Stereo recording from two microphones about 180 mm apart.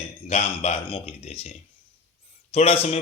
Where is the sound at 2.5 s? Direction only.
35° left (ahead or behind).